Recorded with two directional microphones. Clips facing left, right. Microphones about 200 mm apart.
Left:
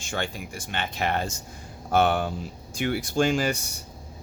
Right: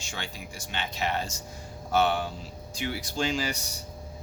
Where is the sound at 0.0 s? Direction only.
55° left (ahead or behind).